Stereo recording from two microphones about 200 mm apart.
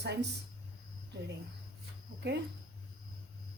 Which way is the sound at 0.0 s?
60° right (ahead or behind).